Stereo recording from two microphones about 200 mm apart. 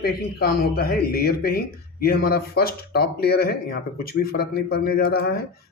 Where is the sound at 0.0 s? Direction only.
50° left (ahead or behind).